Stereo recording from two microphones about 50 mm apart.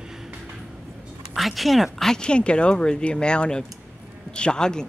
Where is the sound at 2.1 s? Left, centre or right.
Centre.